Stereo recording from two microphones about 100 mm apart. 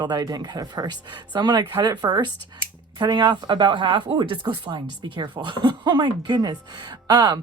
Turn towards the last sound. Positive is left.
turn(degrees=-40)  # may be behind; listen again after turning